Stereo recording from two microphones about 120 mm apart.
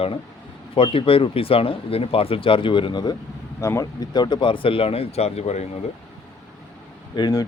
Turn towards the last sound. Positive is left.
turn(degrees=35)  # may be behind; listen again after turning